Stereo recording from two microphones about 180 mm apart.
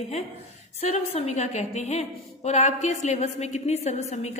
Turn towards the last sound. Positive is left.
turn(degrees=35)  # may be behind; listen again after turning